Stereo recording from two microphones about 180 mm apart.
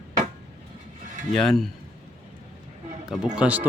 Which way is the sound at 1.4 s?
Centre (ahead or behind).